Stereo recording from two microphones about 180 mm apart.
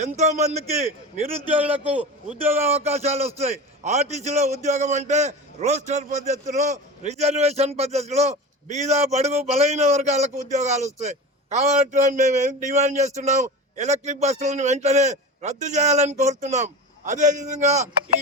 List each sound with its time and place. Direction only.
0.2 s a man's voice: 40° right (ahead or behind)
1.8 s a man's voice: 5° right (ahead or behind)
2.6 s a man's voice: 35° right (ahead or behind)